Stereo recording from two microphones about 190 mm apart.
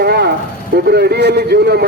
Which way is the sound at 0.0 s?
60° right (ahead or behind).